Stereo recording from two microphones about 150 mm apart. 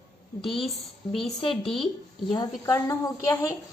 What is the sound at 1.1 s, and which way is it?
Speech, centre (ahead or behind).